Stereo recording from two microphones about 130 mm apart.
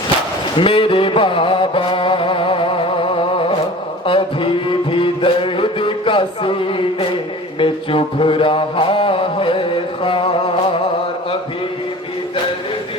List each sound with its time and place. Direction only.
0.6 s mantra: 40° left (ahead or behind)
4.0 s music: 40° left (ahead or behind)